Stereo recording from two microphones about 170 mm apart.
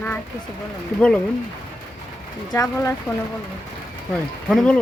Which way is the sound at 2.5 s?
15° left (ahead or behind).